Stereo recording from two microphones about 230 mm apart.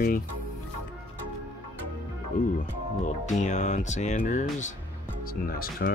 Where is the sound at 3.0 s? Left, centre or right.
Left.